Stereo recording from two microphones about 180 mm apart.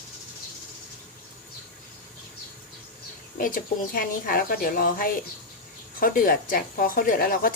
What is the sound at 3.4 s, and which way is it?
A woman's voice, 50° left (ahead or behind).